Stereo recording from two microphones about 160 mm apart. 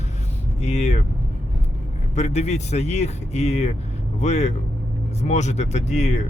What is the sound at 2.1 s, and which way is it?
Speech, 45° left (ahead or behind).